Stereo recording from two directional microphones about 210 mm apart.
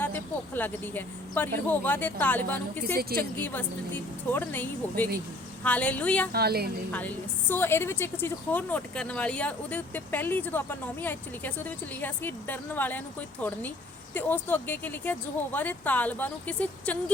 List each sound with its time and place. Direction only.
0.0 s a woman's voice: 10° left (ahead or behind)
2.8 s a woman's voice: 45° right (ahead or behind)
3.2 s a woman's voice: 10° left (ahead or behind)
6.3 s a woman's voice: 50° right (ahead or behind)
6.9 s a woman's voice: 5° left (ahead or behind)